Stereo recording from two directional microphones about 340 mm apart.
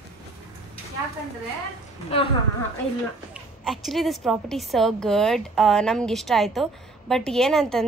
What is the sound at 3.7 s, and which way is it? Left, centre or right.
A woman's voice, centre.